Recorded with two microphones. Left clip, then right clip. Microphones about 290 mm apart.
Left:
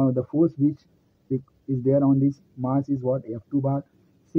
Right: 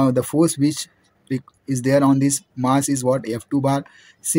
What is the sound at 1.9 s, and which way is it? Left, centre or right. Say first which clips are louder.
Speech: right 4 dB; right.